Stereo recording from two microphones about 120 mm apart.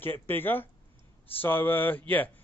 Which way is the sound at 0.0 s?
15° left (ahead or behind).